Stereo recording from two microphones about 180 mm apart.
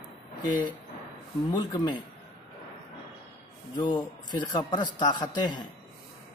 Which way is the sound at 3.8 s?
25° left (ahead or behind).